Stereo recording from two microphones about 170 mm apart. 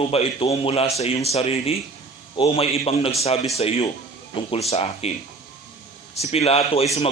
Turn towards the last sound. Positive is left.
turn(degrees=35)  # may be behind; listen again after turning